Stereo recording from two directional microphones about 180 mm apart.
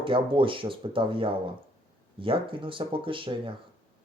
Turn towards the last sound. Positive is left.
turn(degrees=-30)  # may be behind; listen again after turning